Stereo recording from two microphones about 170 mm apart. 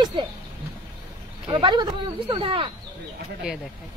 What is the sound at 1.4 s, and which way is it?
Speech, 25° right (ahead or behind).